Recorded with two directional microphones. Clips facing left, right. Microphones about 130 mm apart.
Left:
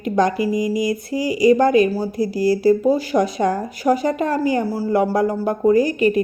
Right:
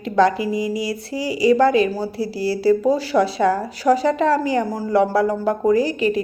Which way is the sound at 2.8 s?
15° left (ahead or behind).